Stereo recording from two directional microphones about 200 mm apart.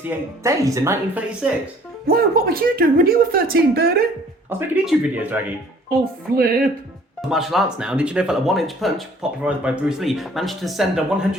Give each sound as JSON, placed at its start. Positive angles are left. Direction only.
{"t": 0.4, "sound": "speech", "side_deg": -15}
{"t": 2.0, "sound": "a woman's voice", "side_deg": -50}
{"t": 4.4, "sound": "speech", "side_deg": -10}
{"t": 6.3, "sound": "a woman's voice", "side_deg": -50}
{"t": 7.3, "sound": "speech", "side_deg": 0}